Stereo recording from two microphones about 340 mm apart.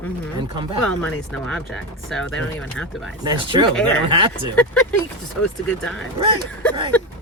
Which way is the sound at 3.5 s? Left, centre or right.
Centre.